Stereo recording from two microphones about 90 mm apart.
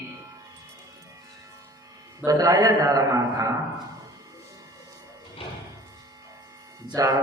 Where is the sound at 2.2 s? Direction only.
40° right (ahead or behind).